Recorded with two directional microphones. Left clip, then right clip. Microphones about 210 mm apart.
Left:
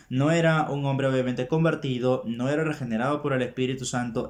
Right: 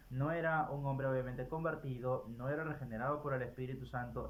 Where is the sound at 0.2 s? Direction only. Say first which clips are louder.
Left 13 dB; 15° left (ahead or behind).